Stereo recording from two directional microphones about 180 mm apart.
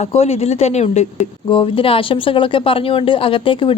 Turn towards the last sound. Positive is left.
turn(degrees=30)  # may be behind; listen again after turning